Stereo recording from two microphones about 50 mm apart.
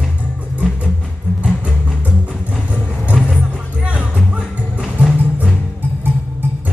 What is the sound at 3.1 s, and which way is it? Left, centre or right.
Music, centre.